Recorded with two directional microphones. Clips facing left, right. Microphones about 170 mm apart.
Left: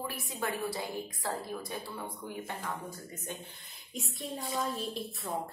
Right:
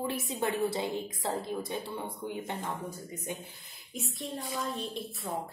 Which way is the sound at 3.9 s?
Centre (ahead or behind).